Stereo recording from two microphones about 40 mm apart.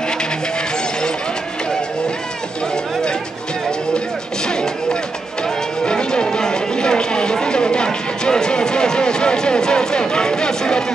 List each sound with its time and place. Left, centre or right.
2.7 s run: centre
5.9 s music: left
6.2 s a sound: centre